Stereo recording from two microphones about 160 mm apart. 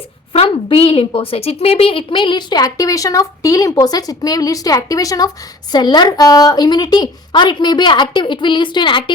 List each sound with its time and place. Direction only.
0.3 s a woman's voice: 35° left (ahead or behind)